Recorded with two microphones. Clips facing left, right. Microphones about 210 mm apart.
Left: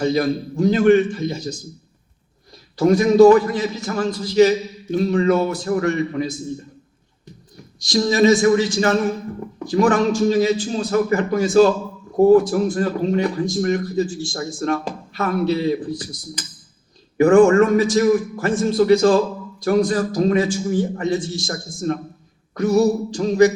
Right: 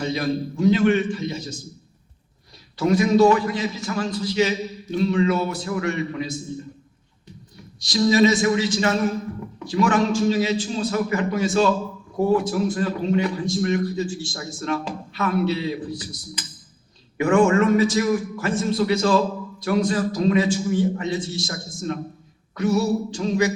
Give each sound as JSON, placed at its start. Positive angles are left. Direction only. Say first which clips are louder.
{"t": 0.0, "sound": "a man's voice", "louder": "left 5 dB", "side_deg": 40}
{"t": 2.7, "sound": "a man's voice", "louder": "left 5 dB", "side_deg": 40}
{"t": 7.5, "sound": "a man's voice", "louder": "left 5 dB", "side_deg": 45}
{"t": 17.2, "sound": "a man's voice", "louder": "left 6 dB", "side_deg": 40}